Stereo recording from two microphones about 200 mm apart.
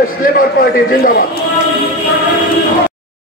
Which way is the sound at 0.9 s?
45° left (ahead or behind).